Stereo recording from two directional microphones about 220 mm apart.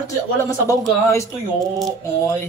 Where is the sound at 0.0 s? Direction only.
15° left (ahead or behind).